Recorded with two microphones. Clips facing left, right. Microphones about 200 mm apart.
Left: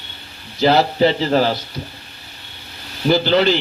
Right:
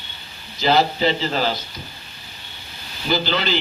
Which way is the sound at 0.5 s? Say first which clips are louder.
Left 4 dB; 70° left (ahead or behind).